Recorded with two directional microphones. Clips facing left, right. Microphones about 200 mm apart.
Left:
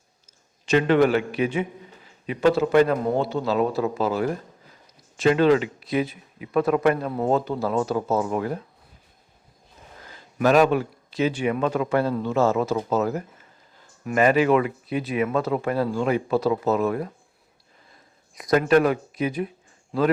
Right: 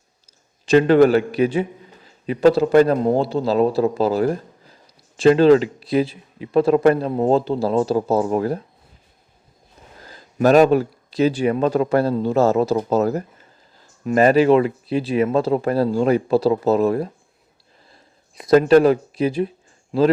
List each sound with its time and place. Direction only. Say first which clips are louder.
0.6 s speech: right 6 dB; 35° right (ahead or behind)
10.1 s speech: right 5 dB; 35° right (ahead or behind)